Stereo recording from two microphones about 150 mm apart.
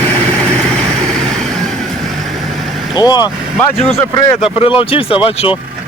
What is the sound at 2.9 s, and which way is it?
Speech, 25° left (ahead or behind).